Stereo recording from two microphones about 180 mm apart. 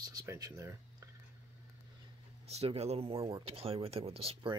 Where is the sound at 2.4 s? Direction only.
35° right (ahead or behind).